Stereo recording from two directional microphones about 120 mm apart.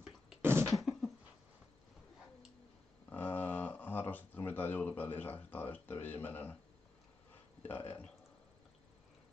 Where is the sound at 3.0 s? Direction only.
15° left (ahead or behind).